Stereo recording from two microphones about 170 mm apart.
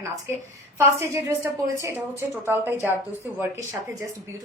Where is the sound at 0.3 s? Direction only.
15° right (ahead or behind).